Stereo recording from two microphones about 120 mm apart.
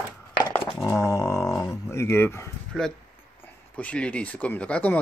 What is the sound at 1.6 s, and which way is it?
Speech, 25° left (ahead or behind).